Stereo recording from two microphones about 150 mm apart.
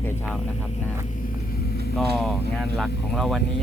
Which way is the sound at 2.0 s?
Centre (ahead or behind).